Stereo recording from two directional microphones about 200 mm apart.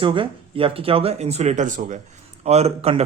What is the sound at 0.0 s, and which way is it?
Speech, 25° right (ahead or behind).